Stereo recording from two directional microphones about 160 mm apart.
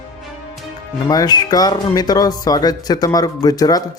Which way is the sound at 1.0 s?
25° left (ahead or behind).